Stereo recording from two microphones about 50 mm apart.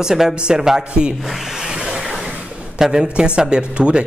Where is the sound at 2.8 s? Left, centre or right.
Centre.